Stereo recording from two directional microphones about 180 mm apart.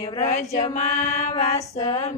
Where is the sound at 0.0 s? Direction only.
35° left (ahead or behind).